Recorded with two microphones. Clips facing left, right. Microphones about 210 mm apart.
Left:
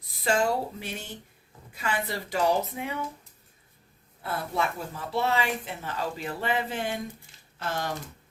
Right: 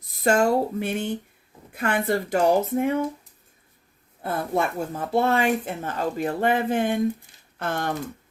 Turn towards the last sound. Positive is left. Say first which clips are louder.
# right 5 dB
turn(degrees=-55)  # may be behind; listen again after turning